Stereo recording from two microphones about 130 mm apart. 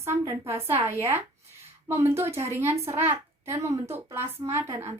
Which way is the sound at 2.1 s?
20° right (ahead or behind).